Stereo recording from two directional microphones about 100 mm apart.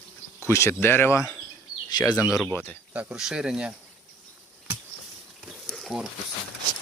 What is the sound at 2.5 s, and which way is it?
Speech, 20° left (ahead or behind).